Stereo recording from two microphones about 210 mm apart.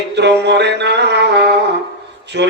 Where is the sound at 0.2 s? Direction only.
55° right (ahead or behind).